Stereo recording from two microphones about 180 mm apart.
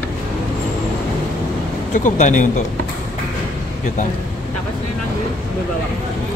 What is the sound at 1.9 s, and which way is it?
Speech, 45° left (ahead or behind).